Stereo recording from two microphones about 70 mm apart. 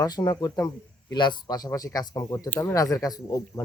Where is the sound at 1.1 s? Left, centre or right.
Left.